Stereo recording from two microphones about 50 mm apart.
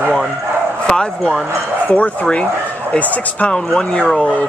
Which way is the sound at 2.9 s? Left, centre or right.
Left.